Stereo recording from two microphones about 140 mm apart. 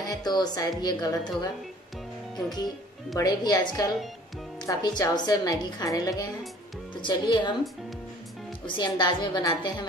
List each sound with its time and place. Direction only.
0.0 s a woman's voice: 30° left (ahead or behind)
2.3 s a woman's voice: 30° left (ahead or behind)
8.6 s a woman's voice: 35° left (ahead or behind)